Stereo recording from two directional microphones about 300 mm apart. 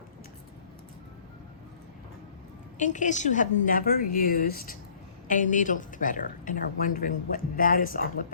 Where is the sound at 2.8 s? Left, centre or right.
Left.